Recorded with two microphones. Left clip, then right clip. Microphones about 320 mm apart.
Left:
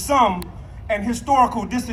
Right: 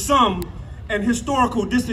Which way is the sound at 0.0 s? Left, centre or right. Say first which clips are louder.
Even; left.